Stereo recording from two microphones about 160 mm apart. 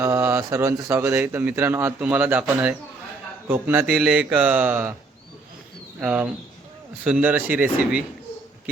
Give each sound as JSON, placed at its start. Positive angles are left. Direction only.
{"t": 0.0, "sound": "a man's voice", "side_deg": -15}
{"t": 6.0, "sound": "speech", "side_deg": -5}